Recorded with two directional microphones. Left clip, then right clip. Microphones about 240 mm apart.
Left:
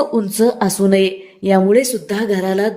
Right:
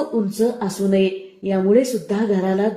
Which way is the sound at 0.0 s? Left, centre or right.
Left.